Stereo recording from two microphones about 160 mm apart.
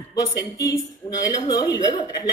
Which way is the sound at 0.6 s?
25° left (ahead or behind).